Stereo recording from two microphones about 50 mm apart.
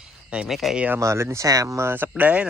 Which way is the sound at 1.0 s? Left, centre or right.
Right.